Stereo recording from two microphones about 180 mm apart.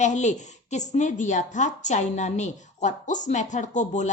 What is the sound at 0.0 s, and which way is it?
A woman's voice, 40° left (ahead or behind).